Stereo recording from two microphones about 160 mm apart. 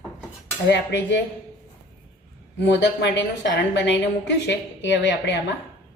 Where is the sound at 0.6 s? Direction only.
90° left.